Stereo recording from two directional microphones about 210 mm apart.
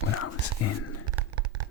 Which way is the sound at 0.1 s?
90° left.